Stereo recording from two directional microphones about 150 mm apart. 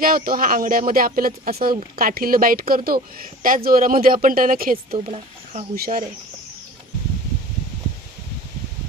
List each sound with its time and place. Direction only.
0.0 s speech: 75° right (ahead or behind)
3.4 s speech: 70° right (ahead or behind)
4.9 s speech: 45° right (ahead or behind)
5.8 s speech: 70° right (ahead or behind)